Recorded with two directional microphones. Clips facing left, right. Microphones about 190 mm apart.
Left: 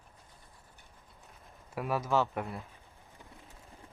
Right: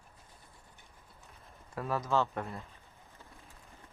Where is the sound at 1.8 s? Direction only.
10° left (ahead or behind).